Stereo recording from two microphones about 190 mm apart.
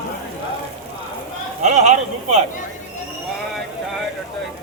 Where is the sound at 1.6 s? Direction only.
40° right (ahead or behind).